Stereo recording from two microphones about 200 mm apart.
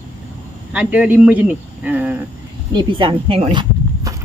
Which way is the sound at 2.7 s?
25° right (ahead or behind).